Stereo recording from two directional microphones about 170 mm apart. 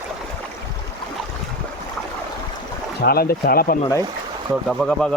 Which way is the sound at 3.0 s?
65° left (ahead or behind).